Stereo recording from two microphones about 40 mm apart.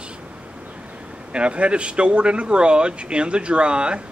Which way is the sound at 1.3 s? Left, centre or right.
Right.